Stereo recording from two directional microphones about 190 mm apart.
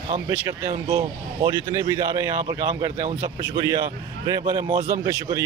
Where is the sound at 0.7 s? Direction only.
20° right (ahead or behind).